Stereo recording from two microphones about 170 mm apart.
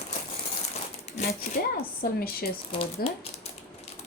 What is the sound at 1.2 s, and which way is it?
Speech, 40° left (ahead or behind).